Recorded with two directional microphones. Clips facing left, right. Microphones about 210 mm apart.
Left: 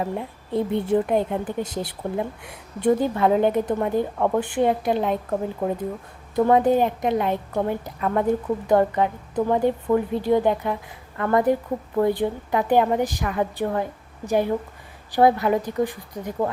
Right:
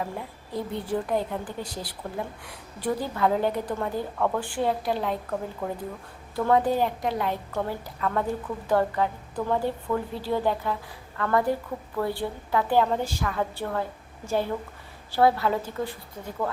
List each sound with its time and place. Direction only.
0.0 s a woman's voice: 20° left (ahead or behind)